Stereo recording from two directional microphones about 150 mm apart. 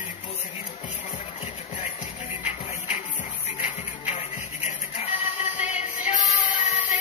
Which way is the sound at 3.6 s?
55° left (ahead or behind).